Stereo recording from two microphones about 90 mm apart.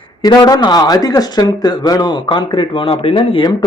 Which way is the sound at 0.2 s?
45° left (ahead or behind).